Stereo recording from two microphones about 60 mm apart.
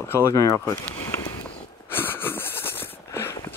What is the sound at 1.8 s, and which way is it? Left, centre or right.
Wheeze, left.